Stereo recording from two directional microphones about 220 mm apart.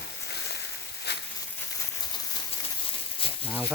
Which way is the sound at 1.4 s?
10° left (ahead or behind).